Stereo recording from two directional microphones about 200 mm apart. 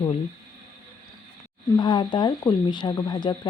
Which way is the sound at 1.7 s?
25° left (ahead or behind).